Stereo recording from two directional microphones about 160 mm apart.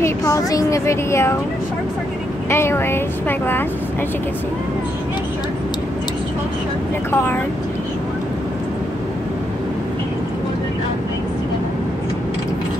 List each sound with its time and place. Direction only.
0.0 s speech: 20° left (ahead or behind)
2.5 s speech: 15° left (ahead or behind)